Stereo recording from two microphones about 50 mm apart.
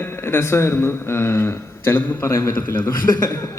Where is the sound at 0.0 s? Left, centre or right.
Left.